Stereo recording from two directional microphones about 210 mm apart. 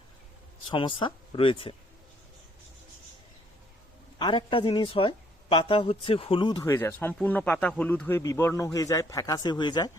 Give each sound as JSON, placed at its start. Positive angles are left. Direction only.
{"t": 0.7, "sound": "a woman's voice", "side_deg": 25}
{"t": 4.2, "sound": "a woman's voice", "side_deg": 20}
{"t": 6.7, "sound": "speech", "side_deg": 10}